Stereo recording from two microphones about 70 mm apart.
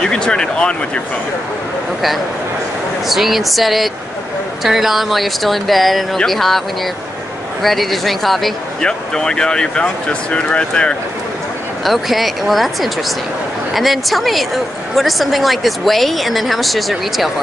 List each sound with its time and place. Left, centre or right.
0.0 s speech: centre
3.1 s a woman's voice: centre
7.6 s a woman's voice: centre
11.8 s a woman's voice: centre